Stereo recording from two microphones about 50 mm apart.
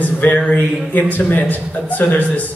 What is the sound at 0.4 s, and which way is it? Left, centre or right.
Speech, left.